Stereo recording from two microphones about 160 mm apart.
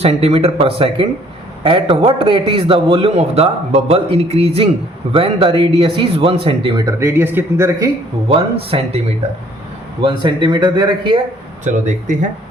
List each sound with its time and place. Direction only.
0.0 s a man's voice: 40° right (ahead or behind)
7.0 s a man's voice: 15° right (ahead or behind)
8.3 s a man's voice: 35° right (ahead or behind)
10.0 s speech: 30° right (ahead or behind)
11.6 s speech: 50° right (ahead or behind)